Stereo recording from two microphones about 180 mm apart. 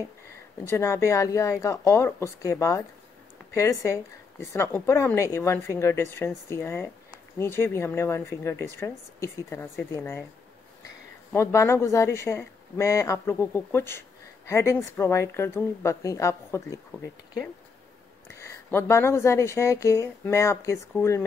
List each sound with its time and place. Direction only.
0.7 s speech: 15° left (ahead or behind)
3.8 s speech: 15° left (ahead or behind)
11.3 s speech: 15° left (ahead or behind)
18.3 s speech: 15° left (ahead or behind)